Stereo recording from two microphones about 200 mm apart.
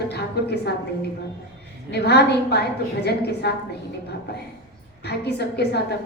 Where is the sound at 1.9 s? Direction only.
55° left (ahead or behind).